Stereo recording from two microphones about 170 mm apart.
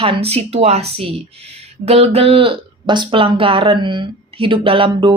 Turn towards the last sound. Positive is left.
turn(degrees=-30)  # may be behind; listen again after turning